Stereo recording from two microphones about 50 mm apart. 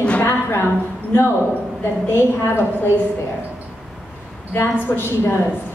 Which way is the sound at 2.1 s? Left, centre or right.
Left.